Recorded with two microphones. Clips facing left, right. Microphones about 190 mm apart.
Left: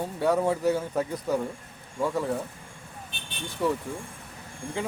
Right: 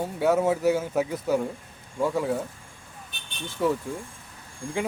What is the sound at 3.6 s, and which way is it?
Speech, 5° right (ahead or behind).